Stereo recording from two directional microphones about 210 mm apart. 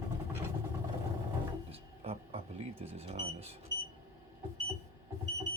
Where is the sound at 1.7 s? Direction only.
30° right (ahead or behind).